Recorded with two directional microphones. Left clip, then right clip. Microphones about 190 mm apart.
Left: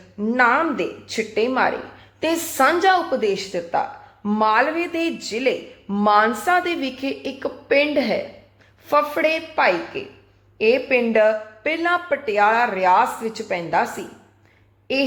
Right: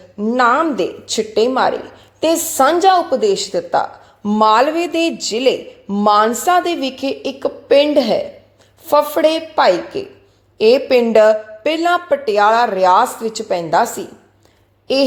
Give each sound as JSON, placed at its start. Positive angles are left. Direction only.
{"t": 0.2, "sound": "a woman's voice", "side_deg": -15}